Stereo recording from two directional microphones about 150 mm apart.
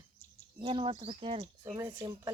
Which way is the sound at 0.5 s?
40° right (ahead or behind).